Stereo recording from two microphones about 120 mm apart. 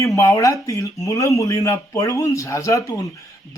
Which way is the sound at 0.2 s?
25° left (ahead or behind).